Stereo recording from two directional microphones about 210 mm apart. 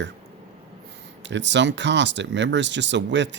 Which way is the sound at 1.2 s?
55° right (ahead or behind).